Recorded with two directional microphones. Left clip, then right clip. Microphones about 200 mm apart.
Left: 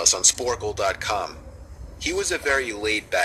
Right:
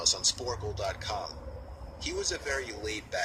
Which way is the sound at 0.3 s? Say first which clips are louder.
Left 10 dB; 30° left (ahead or behind).